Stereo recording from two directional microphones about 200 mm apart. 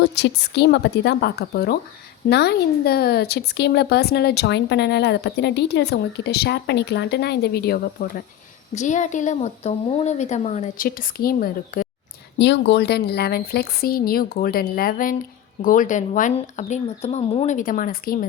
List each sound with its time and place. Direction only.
0.2 s speech: 55° left (ahead or behind)
8.7 s a woman's voice: 35° left (ahead or behind)
12.4 s a woman's voice: 60° left (ahead or behind)